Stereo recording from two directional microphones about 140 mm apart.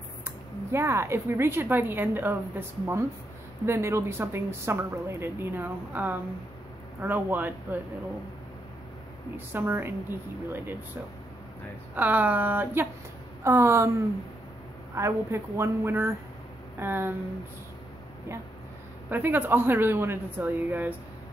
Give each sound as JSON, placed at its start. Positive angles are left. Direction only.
{"t": 0.2, "sound": "speech", "side_deg": -20}
{"t": 9.5, "sound": "speech", "side_deg": -15}
{"t": 11.9, "sound": "a woman's voice", "side_deg": -10}
{"t": 15.0, "sound": "a woman's voice", "side_deg": -20}
{"t": 19.0, "sound": "speech", "side_deg": -15}